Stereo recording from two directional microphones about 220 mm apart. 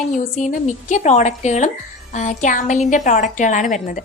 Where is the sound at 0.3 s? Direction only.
35° left (ahead or behind).